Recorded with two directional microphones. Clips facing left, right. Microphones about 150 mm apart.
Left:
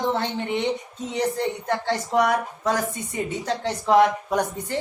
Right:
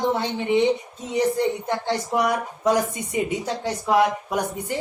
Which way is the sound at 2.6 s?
15° right (ahead or behind).